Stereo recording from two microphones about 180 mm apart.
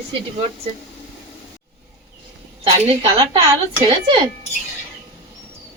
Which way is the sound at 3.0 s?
30° right (ahead or behind).